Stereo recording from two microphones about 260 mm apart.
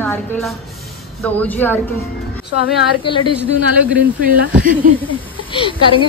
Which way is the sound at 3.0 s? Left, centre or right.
Centre.